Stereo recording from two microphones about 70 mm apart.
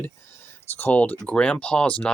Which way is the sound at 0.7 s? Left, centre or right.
Left.